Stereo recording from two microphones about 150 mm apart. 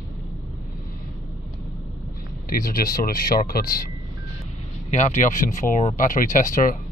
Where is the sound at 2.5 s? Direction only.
70° left (ahead or behind).